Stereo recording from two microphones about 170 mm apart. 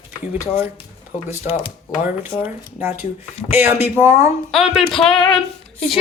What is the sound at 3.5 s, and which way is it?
Speech, 10° right (ahead or behind).